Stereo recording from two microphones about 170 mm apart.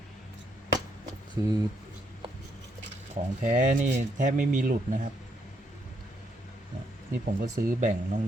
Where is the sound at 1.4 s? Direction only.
20° right (ahead or behind).